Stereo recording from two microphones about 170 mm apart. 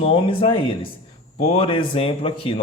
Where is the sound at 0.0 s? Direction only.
30° left (ahead or behind).